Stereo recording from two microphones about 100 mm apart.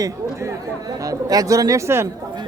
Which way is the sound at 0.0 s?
35° right (ahead or behind).